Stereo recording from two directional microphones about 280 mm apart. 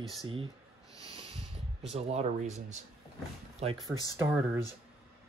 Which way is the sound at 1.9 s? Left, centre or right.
Right.